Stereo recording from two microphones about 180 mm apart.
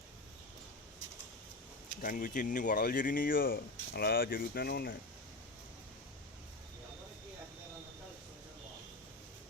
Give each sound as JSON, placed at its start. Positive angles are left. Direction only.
{"t": 2.0, "sound": "speech", "side_deg": 50}